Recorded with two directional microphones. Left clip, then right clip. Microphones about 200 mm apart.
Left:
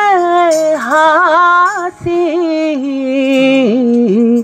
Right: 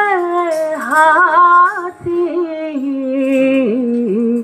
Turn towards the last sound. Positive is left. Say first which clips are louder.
# left 5 dB
turn(degrees=35)  # may be behind; listen again after turning